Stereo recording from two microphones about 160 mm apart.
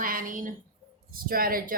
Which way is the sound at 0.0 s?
60° right (ahead or behind).